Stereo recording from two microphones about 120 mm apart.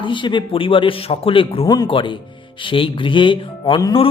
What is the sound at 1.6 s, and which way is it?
Speech, 35° left (ahead or behind).